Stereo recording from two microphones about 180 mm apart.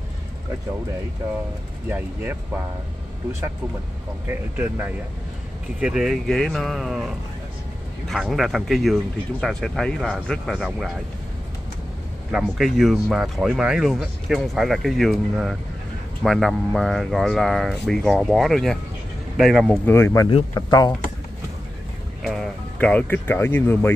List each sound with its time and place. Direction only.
1.9 s speech: 10° right (ahead or behind)
4.6 s speech: 10° right (ahead or behind)
8.1 s speech: centre (ahead or behind)
12.3 s speech: 5° right (ahead or behind)
19.9 s speech: 15° left (ahead or behind)
20.2 s speech: 25° left (ahead or behind)
22.2 s speech: centre (ahead or behind)